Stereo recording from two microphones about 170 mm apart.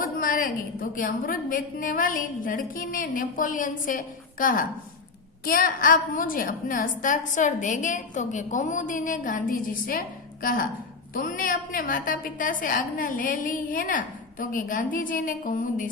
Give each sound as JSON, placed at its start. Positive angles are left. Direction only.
{"t": 0.0, "sound": "a woman's voice", "side_deg": 55}